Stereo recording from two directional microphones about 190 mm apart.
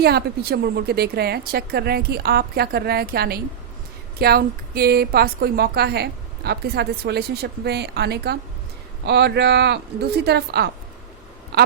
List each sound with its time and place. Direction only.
0.0 s a woman's voice: 55° right (ahead or behind)